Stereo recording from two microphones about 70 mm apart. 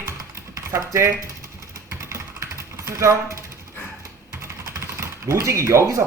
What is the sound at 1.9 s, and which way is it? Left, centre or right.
Typing, right.